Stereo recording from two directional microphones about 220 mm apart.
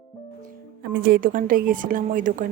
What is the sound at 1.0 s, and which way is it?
Speech, 40° right (ahead or behind).